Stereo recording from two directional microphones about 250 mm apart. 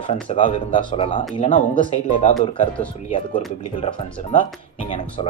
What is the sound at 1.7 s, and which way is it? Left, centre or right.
Speech, centre.